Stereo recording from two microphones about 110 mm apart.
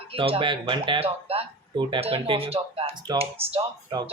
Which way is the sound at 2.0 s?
60° right (ahead or behind).